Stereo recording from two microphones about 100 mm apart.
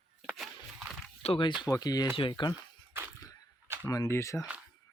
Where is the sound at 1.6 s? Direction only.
40° left (ahead or behind).